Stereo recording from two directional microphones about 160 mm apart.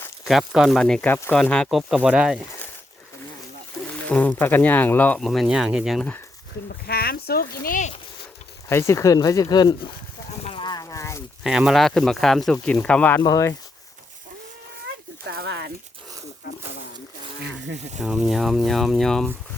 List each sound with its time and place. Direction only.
0.3 s speech: centre (ahead or behind)
4.1 s speech: 10° left (ahead or behind)
5.2 s speech: centre (ahead or behind)
6.7 s speech: 75° left (ahead or behind); by 7.9 s 55° left (ahead or behind)
8.7 s speech: 15° left (ahead or behind)
10.4 s a sound: 30° left (ahead or behind)
11.4 s speech: 5° right (ahead or behind)
13.2 s speech: 20° left (ahead or behind)
14.8 s a sound: 85° right
18.0 s speech: 5° right (ahead or behind)